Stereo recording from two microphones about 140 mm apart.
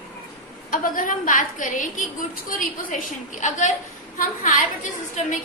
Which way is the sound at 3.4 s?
60° left (ahead or behind).